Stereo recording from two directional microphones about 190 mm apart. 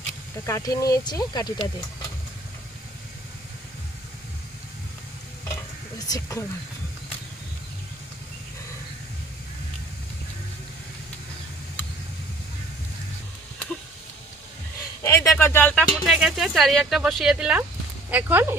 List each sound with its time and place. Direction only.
0.4 s speech: 20° left (ahead or behind)
6.1 s speech: 20° left (ahead or behind)
15.0 s speech: 15° left (ahead or behind); by 18.5 s 10° right (ahead or behind)